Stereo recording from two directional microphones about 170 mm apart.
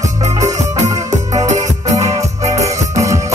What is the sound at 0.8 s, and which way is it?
Music, 20° right (ahead or behind).